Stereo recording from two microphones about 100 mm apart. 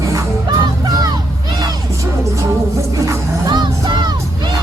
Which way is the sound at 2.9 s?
30° right (ahead or behind).